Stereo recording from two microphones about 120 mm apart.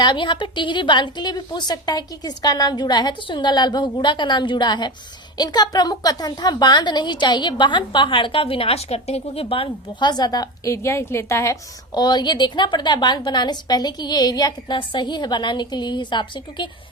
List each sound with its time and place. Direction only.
0.0 s a woman's voice: 40° left (ahead or behind); by 11.5 s 25° left (ahead or behind)
11.9 s a woman's voice: 35° left (ahead or behind)